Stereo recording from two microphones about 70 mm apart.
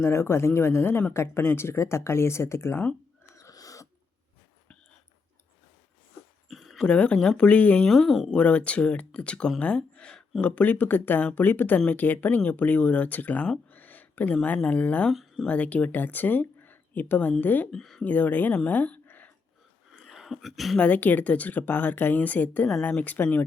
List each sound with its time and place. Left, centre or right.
0.0 s speech: left
3.3 s a sound: left
6.5 s dog: centre
6.8 s speech: centre
7.9 s speech: centre
8.4 s speech: centre
13.7 s a sound: left
14.4 s speech: left
15.1 s speech: centre
15.4 s speech: left
17.7 s speech: centre
18.0 s speech: left
20.0 s a sound: centre
20.7 s speech: left